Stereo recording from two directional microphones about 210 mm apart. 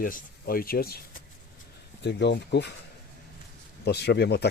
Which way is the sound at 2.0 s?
55° left (ahead or behind).